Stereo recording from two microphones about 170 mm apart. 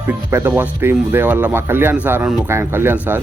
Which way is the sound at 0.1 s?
15° right (ahead or behind).